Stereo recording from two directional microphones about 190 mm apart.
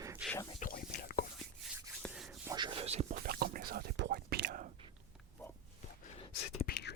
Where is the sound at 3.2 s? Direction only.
55° right (ahead or behind).